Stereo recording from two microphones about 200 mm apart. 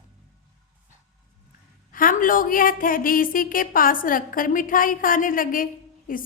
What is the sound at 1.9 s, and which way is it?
A woman's voice, 45° left (ahead or behind).